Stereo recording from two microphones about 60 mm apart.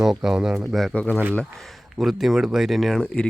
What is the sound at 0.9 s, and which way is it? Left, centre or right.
Speech, left.